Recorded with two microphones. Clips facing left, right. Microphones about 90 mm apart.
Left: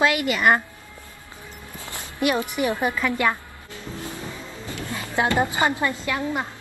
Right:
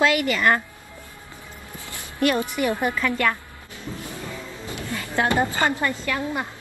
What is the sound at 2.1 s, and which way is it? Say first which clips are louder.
A woman's voice: right 1 dB; 15° left (ahead or behind).